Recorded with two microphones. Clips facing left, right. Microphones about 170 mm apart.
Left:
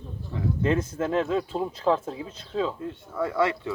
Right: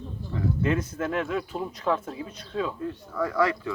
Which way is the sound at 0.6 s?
30° left (ahead or behind).